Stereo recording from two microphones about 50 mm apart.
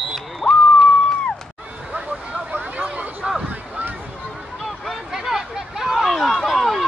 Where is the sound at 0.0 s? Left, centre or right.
Centre.